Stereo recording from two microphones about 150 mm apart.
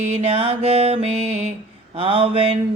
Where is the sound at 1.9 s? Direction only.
40° right (ahead or behind).